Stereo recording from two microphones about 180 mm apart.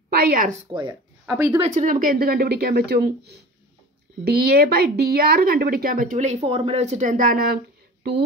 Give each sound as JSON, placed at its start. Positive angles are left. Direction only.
{"t": 0.1, "sound": "speech", "side_deg": -55}
{"t": 1.2, "sound": "speech", "side_deg": -10}
{"t": 1.6, "sound": "speech", "side_deg": -45}